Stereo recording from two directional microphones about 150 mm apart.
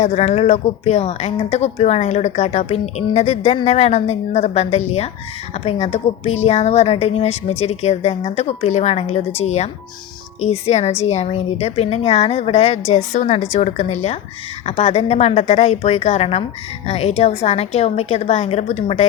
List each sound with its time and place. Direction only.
0.0 s speech: 50° left (ahead or behind)